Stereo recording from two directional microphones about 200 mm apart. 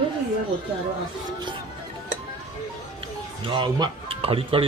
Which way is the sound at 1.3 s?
20° right (ahead or behind).